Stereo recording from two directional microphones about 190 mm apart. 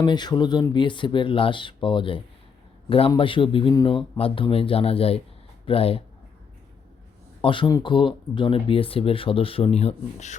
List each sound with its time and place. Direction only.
0.0 s speech: 25° left (ahead or behind)
7.4 s speech: 25° left (ahead or behind)